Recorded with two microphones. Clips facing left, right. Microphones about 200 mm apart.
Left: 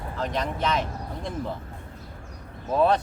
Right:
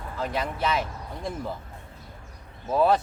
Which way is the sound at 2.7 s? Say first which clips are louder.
Even; 5° right (ahead or behind).